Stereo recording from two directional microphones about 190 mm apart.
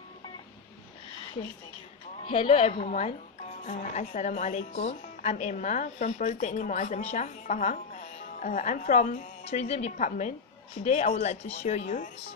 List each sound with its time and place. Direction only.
2.2 s speech: 30° left (ahead or behind)